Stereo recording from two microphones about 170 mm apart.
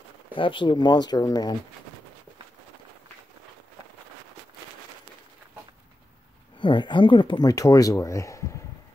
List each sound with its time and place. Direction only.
0.3 s speech: 30° left (ahead or behind)
6.6 s speech: 30° left (ahead or behind)